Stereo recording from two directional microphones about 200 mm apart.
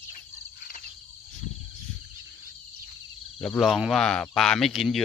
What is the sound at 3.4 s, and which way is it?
Speech, centre (ahead or behind).